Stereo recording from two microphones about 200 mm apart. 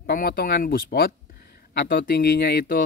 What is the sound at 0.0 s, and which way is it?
Speech, 50° left (ahead or behind).